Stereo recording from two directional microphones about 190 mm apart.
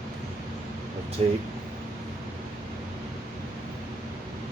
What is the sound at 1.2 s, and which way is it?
Speech, 35° right (ahead or behind).